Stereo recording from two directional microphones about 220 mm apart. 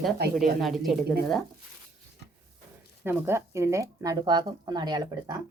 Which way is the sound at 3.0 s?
10° right (ahead or behind).